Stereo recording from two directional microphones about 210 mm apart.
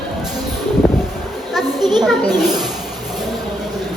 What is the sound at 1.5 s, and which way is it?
Speech, centre (ahead or behind).